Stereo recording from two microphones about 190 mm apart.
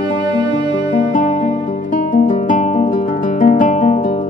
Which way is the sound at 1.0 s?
40° left (ahead or behind).